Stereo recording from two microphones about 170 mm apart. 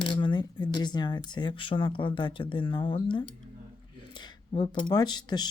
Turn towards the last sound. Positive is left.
turn(degrees=25)  # may be behind; listen again after turning